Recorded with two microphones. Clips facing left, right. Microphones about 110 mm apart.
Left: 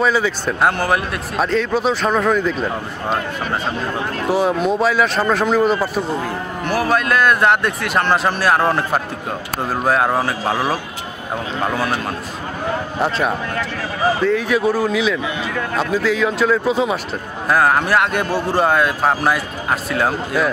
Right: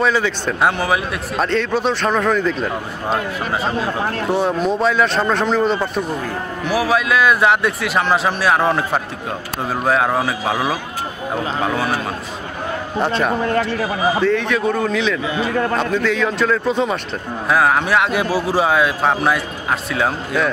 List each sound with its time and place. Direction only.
0.0 s a man's voice: 5° left (ahead or behind)
3.8 s a man's voice: centre (ahead or behind)
13.0 s a man's voice: centre (ahead or behind)
13.5 s speech: 35° right (ahead or behind)
14.2 s a man's voice: 5° left (ahead or behind)
15.3 s speech: 35° right (ahead or behind)
15.8 s a man's voice: centre (ahead or behind)